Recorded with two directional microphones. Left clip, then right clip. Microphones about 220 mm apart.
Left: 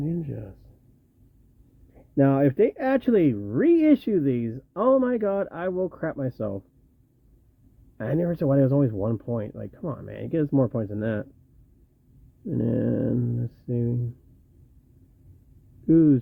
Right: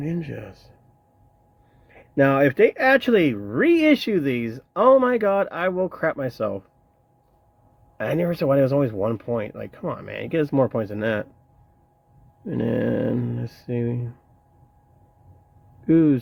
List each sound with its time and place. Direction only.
0.0 s speech: 5° left (ahead or behind)
2.1 s speech: 5° left (ahead or behind)
7.9 s speech: 10° left (ahead or behind)
12.5 s speech: centre (ahead or behind)
15.9 s speech: centre (ahead or behind)